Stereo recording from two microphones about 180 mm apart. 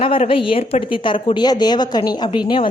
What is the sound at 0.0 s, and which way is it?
Speech, 30° left (ahead or behind).